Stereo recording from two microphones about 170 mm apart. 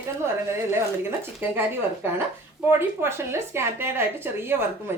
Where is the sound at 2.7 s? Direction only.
15° right (ahead or behind).